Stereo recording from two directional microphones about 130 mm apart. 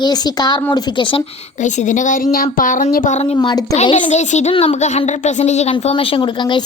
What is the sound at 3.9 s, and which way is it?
Speech, 65° left (ahead or behind).